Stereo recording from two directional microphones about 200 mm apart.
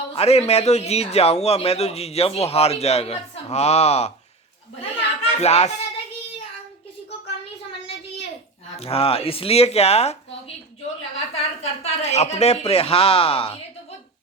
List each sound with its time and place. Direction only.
0.1 s a man's voice: 30° left (ahead or behind)
4.8 s children playing: 30° left (ahead or behind)
8.7 s a man's voice: 30° left (ahead or behind)
11.6 s speech: 35° left (ahead or behind)